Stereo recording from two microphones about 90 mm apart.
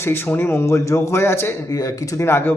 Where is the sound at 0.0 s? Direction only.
25° left (ahead or behind).